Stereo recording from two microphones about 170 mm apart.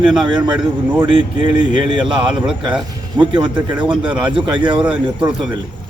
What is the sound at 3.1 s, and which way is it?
Speech, 25° right (ahead or behind).